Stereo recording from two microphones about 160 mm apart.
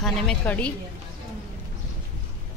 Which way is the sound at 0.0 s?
5° left (ahead or behind).